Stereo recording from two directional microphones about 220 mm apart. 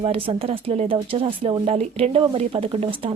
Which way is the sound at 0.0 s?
25° right (ahead or behind).